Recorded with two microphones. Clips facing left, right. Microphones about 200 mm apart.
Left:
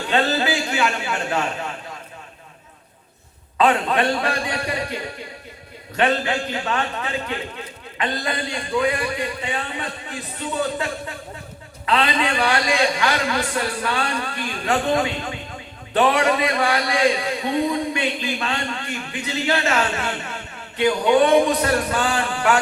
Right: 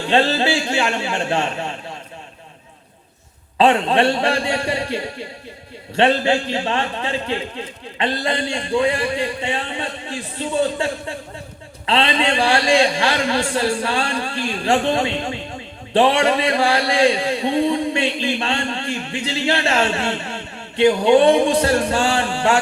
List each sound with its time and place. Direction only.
0.1 s speech: 30° right (ahead or behind)
3.6 s speech: 30° right (ahead or behind)